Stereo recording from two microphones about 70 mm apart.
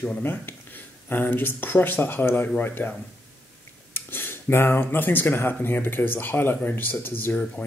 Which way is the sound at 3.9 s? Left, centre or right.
Left.